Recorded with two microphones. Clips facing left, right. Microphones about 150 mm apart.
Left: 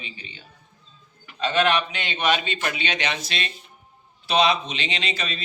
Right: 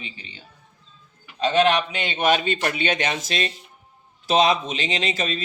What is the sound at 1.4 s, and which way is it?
Speech, 35° right (ahead or behind).